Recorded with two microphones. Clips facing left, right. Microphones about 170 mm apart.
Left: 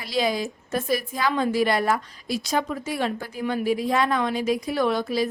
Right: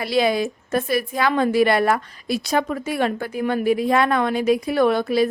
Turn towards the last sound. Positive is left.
turn(degrees=-60)  # may be behind; listen again after turning